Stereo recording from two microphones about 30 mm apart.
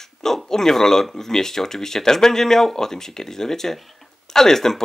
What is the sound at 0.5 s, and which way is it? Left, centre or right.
Speech, centre.